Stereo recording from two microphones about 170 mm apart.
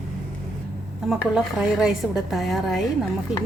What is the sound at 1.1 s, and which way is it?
A woman's voice, 5° right (ahead or behind).